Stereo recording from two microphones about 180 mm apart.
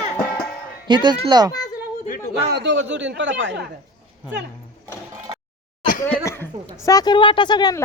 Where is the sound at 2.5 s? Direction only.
85° right.